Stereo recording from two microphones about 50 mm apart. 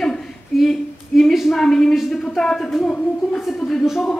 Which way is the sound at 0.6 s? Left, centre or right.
Centre.